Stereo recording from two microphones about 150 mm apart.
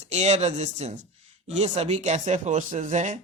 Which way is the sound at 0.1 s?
50° right (ahead or behind).